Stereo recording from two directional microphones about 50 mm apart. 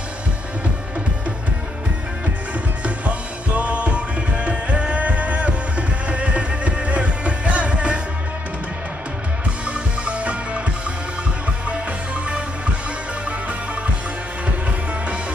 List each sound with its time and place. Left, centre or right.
3.5 s music: right
9.7 s music: right